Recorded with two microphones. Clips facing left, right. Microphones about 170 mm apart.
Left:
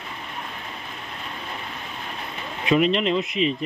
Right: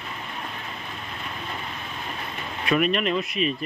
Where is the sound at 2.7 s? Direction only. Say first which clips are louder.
Left 3 dB; 20° left (ahead or behind).